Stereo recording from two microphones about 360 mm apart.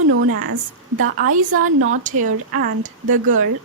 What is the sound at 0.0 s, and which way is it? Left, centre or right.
Speech, right.